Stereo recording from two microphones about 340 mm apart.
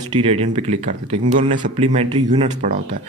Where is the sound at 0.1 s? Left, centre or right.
Centre.